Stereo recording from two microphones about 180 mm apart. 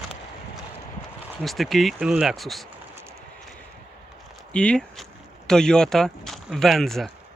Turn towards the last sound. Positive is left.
turn(degrees=0)  # may be behind; listen again after turning